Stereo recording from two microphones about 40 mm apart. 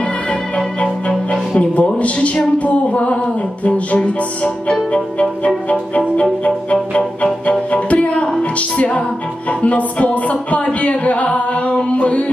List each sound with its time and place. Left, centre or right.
1.6 s music: left